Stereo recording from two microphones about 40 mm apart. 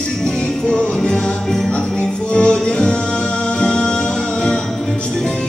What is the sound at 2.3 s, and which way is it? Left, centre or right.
Music, left.